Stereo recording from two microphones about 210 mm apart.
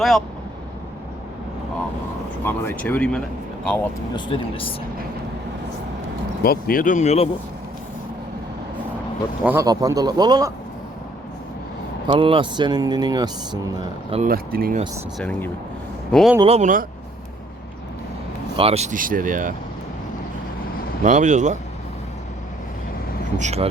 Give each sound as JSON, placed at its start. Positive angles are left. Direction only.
{"t": 2.4, "sound": "speech", "side_deg": 10}
{"t": 4.1, "sound": "speech", "side_deg": 25}
{"t": 6.4, "sound": "speech", "side_deg": 45}
{"t": 9.4, "sound": "speech", "side_deg": -10}
{"t": 12.0, "sound": "speech", "side_deg": -25}
{"t": 14.2, "sound": "speech", "side_deg": -45}
{"t": 15.2, "sound": "speech", "side_deg": 5}
{"t": 16.4, "sound": "speech", "side_deg": -30}
{"t": 18.5, "sound": "speech", "side_deg": -30}
{"t": 21.0, "sound": "speech", "side_deg": -35}
{"t": 23.4, "sound": "speech", "side_deg": -30}